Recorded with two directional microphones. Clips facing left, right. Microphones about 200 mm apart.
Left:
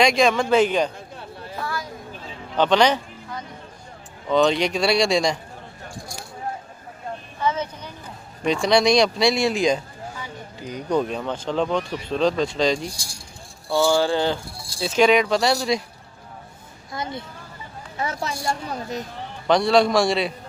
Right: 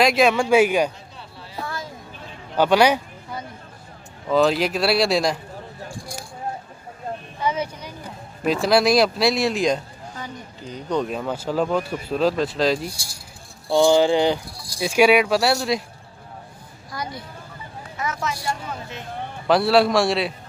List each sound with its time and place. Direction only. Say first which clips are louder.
0.0 s speech: right 1 dB; 5° right (ahead or behind)
1.1 s chatter: left 5 dB; 50° left (ahead or behind)
2.5 s a sound: right 1 dB; 10° right (ahead or behind)
4.3 s speech: even; 5° right (ahead or behind)
7.4 s vehicle: even; 10° right (ahead or behind)
8.5 s speech: even; 5° right (ahead or behind)
11.1 s speech: right 1 dB; 5° right (ahead or behind)
13.7 s speech: right 3 dB; 20° right (ahead or behind); by 15.8 s centre (ahead or behind)
16.9 s a woman's voice: left 1 dB; 25° left (ahead or behind)
19.4 s speech: even; 5° right (ahead or behind)